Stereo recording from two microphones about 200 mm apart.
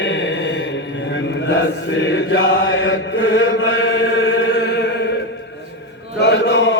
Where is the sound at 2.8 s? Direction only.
65° left (ahead or behind).